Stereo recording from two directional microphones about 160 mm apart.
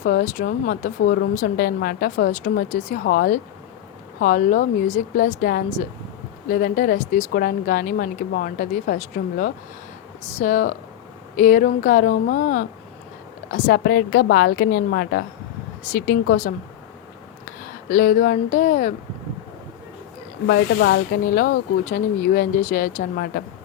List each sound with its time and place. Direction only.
0.0 s speech: 60° left (ahead or behind)
1.0 s speech: 80° left; by 12.6 s 55° left (ahead or behind)
13.5 s a woman's voice: 90° left
15.9 s speech: 60° left (ahead or behind)
17.8 s speech: 60° left (ahead or behind)
20.5 s speech: 90° left; by 23.3 s 70° left (ahead or behind)